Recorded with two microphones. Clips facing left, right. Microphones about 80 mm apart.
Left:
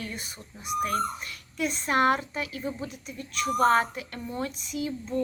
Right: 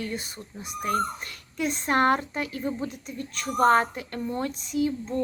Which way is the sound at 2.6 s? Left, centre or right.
Centre.